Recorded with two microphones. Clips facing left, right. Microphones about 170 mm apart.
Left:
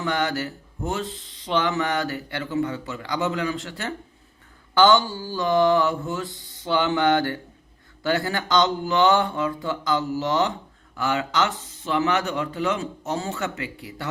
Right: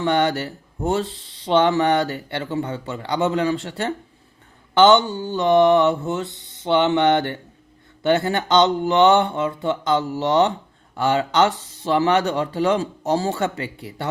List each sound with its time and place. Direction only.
0.0 s speech: 30° right (ahead or behind)